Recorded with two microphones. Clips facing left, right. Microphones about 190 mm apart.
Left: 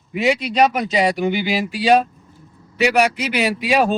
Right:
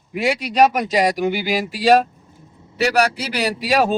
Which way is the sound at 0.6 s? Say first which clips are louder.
Right 2 dB; 5° right (ahead or behind).